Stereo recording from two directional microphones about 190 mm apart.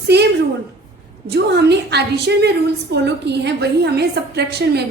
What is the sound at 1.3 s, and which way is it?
A woman's voice, 60° right (ahead or behind).